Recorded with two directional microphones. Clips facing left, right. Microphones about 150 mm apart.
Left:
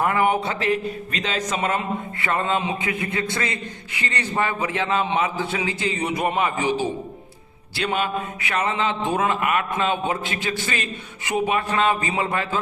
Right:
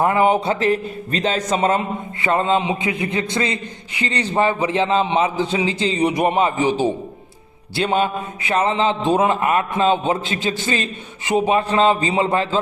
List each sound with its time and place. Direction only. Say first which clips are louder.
0.0 s a man's voice: right 4 dB; 25° right (ahead or behind)